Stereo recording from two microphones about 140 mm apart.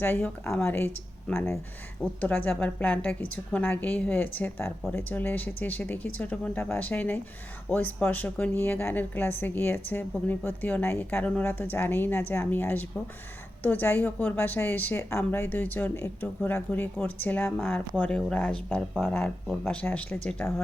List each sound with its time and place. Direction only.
0.0 s a woman's voice: 15° left (ahead or behind)